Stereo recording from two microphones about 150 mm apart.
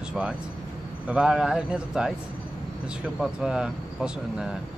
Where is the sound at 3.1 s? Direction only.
5° right (ahead or behind).